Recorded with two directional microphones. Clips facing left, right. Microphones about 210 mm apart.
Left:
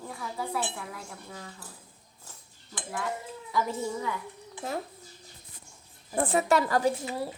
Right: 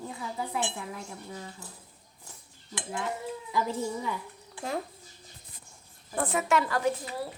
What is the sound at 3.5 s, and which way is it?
Cutlery, 20° right (ahead or behind).